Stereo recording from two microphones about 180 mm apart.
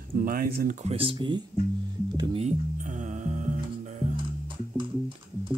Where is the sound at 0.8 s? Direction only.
30° right (ahead or behind).